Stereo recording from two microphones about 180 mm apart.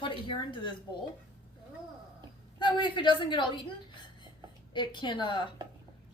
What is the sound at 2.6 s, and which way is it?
A woman's voice, 25° left (ahead or behind).